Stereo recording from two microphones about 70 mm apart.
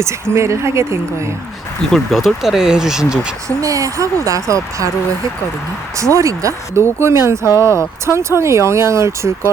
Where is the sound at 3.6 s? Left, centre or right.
Right.